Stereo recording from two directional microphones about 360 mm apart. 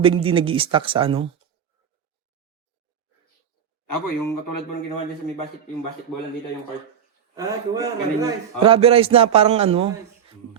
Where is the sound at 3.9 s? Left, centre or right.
Left.